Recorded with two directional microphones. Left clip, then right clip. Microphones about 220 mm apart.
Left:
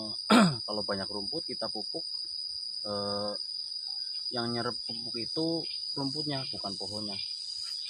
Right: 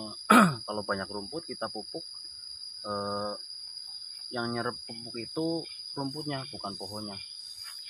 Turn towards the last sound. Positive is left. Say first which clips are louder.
# left 3 dB
turn(degrees=-5)  # may be behind; listen again after turning